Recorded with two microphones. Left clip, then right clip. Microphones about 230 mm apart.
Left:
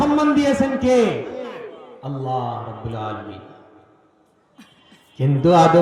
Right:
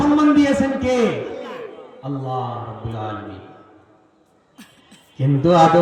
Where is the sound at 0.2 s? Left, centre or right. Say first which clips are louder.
Right 2 dB; left.